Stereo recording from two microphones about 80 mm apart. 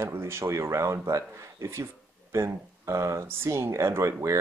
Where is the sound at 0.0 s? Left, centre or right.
Right.